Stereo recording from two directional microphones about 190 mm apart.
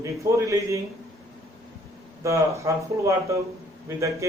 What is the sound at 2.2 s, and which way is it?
Speech, 15° right (ahead or behind).